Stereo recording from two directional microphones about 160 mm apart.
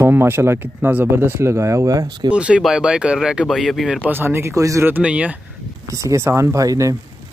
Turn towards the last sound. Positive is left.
turn(degrees=-20)  # may be behind; listen again after turning